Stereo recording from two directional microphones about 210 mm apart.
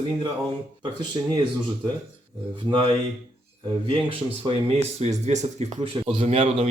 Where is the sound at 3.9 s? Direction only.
25° right (ahead or behind).